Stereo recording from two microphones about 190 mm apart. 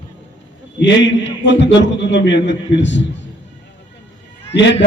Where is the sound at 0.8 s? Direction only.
70° left (ahead or behind).